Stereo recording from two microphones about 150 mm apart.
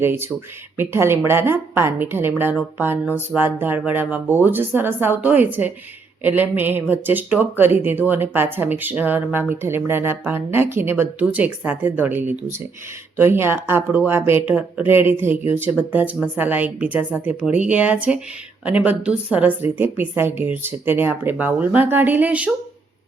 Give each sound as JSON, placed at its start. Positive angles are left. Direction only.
{"t": 0.0, "sound": "a woman's voice", "side_deg": -15}